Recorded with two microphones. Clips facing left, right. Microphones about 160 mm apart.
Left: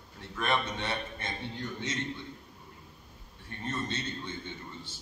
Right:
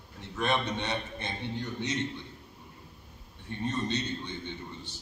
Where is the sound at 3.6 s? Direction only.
15° right (ahead or behind).